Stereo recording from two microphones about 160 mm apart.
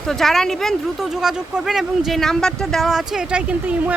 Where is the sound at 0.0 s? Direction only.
Centre (ahead or behind).